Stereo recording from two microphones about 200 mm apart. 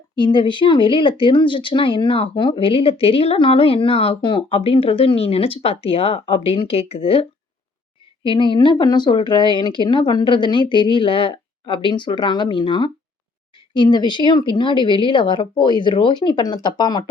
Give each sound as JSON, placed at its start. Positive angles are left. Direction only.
{"t": 0.2, "sound": "speech", "side_deg": 25}